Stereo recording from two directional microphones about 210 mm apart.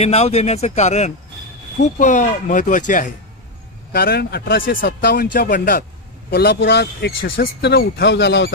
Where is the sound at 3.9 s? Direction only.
45° left (ahead or behind).